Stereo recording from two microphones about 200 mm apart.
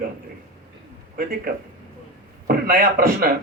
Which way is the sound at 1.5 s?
45° right (ahead or behind).